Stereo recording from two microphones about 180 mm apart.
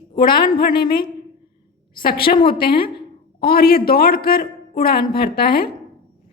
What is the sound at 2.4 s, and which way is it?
Speech, 30° left (ahead or behind).